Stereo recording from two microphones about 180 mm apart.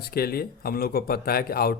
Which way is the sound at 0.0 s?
55° left (ahead or behind).